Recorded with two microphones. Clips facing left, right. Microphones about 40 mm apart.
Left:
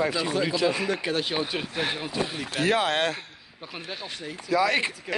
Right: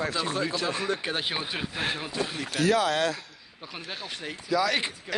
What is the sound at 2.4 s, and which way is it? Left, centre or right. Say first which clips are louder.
Speech: right 1 dB; left.